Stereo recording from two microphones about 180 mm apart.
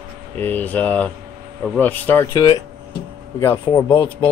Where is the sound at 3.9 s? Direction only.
30° left (ahead or behind).